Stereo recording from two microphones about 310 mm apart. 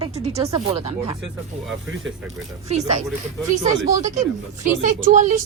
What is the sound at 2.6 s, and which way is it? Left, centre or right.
Speech, right.